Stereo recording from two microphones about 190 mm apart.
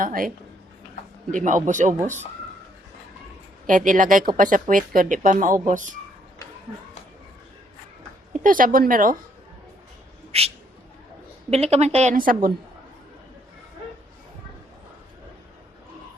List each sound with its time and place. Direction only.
0.0 s speech: 45° right (ahead or behind)
1.3 s speech: 40° right (ahead or behind)
3.7 s speech: 45° right (ahead or behind)
8.3 s a woman's voice: 45° right (ahead or behind)
10.3 s speech: 30° right (ahead or behind)
11.5 s speech: 35° right (ahead or behind)